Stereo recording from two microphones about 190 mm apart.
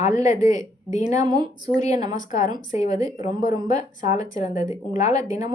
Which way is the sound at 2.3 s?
40° left (ahead or behind).